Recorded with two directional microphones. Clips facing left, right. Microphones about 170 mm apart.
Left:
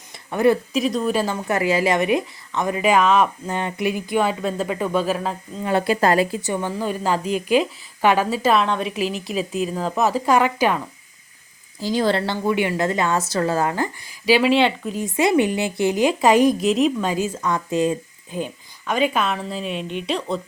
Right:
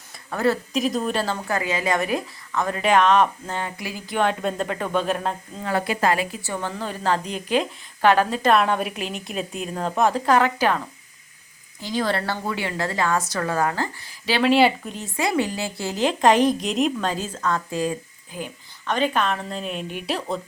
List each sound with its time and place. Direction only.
0.3 s speech: 15° left (ahead or behind)
0.7 s a woman's voice: centre (ahead or behind)
1.1 s speech: 10° left (ahead or behind)
1.5 s speech: 30° left (ahead or behind); by 5.4 s centre (ahead or behind)
5.6 s speech: 30° left (ahead or behind)
6.4 s speech: 15° left (ahead or behind)
8.6 s a woman's voice: 5° right (ahead or behind); by 10.8 s 10° left (ahead or behind)
11.8 s a woman's voice: 30° left (ahead or behind); by 14.5 s 10° left (ahead or behind)
14.5 s a woman's voice: centre (ahead or behind)
15.1 s a woman's voice: 20° left (ahead or behind)
18.9 s a woman's voice: 10° left (ahead or behind)